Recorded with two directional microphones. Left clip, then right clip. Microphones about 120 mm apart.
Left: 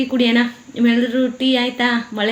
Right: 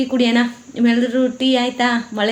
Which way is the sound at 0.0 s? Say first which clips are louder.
Even; centre (ahead or behind).